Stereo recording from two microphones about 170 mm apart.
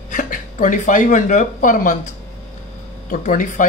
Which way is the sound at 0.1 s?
50° left (ahead or behind).